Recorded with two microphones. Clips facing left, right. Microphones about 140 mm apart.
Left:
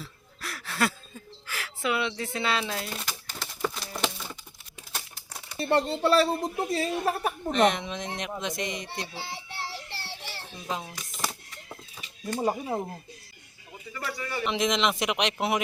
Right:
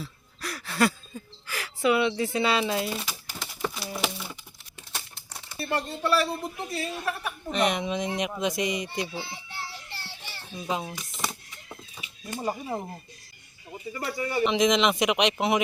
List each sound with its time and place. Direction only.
0.0 s a sound: centre (ahead or behind)
4.9 s typewriter: 5° left (ahead or behind)
5.5 s speech: 30° left (ahead or behind)
7.5 s a man's voice: 5° right (ahead or behind)
9.3 s child singing: 90° left
10.7 s speech: 10° right (ahead or behind)
11.1 s a sound: centre (ahead or behind)
13.9 s speech: 20° right (ahead or behind)
14.4 s a man's voice: centre (ahead or behind)